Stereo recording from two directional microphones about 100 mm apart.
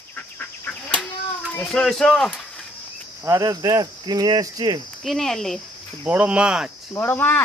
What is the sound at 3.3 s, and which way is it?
Speech, 35° right (ahead or behind).